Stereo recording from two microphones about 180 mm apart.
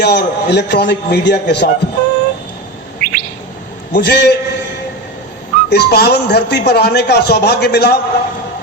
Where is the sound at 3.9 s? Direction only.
70° left (ahead or behind).